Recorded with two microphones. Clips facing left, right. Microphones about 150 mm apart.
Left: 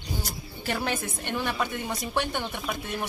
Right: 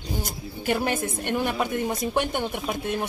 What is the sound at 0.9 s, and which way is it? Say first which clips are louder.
Speech: right 4 dB; 50° right (ahead or behind).